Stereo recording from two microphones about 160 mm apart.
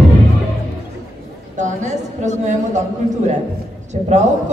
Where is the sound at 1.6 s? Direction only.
50° right (ahead or behind).